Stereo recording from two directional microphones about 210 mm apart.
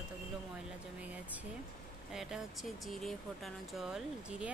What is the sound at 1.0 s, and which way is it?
Speech, 5° right (ahead or behind).